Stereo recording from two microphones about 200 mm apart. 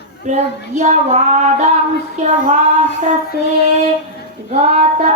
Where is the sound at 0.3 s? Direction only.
35° right (ahead or behind).